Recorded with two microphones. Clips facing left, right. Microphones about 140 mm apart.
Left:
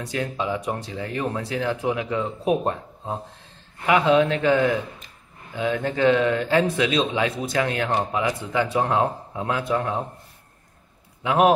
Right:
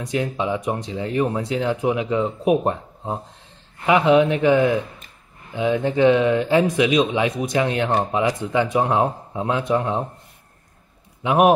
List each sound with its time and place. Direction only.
0.0 s speech: 20° right (ahead or behind)
11.2 s speech: 20° right (ahead or behind)